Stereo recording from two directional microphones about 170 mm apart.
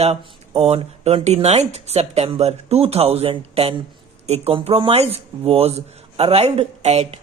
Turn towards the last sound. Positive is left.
turn(degrees=-40)  # may be behind; listen again after turning